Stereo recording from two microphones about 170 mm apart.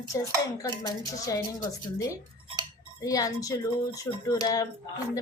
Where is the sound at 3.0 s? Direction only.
20° left (ahead or behind).